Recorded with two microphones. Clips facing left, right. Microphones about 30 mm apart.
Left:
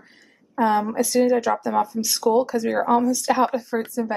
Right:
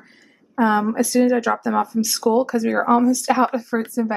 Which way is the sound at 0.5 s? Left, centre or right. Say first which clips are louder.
Right 2 dB; centre.